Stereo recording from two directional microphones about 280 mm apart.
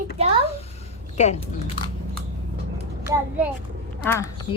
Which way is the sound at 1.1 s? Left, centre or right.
Left.